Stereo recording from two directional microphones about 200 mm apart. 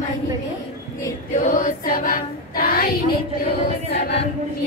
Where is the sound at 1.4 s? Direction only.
35° left (ahead or behind).